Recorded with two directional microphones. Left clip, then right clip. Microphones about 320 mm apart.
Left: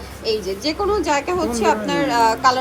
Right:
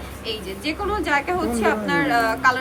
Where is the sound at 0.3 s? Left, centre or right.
Centre.